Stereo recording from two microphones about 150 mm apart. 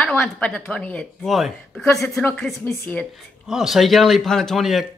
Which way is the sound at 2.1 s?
10° left (ahead or behind).